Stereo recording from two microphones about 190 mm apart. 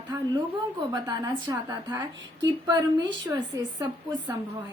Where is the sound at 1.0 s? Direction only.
15° right (ahead or behind).